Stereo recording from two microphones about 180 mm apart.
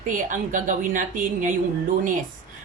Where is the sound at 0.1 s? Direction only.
45° right (ahead or behind).